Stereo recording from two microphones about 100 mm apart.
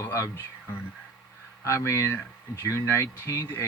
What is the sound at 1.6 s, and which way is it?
Speech, 30° left (ahead or behind).